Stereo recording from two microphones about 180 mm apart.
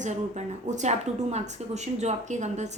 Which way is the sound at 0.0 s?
40° right (ahead or behind).